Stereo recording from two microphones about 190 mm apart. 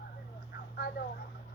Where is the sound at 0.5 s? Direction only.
55° left (ahead or behind).